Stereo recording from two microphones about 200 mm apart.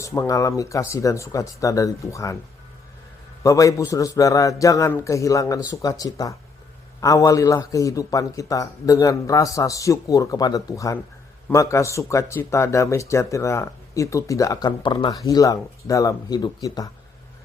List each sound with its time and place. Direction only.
0.0 s a man's voice: 15° left (ahead or behind)
3.4 s a man's voice: 15° left (ahead or behind)